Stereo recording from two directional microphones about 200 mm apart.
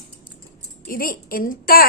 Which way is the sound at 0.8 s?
45° left (ahead or behind).